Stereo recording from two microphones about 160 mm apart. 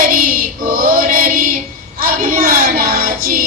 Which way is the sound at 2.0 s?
60° right (ahead or behind).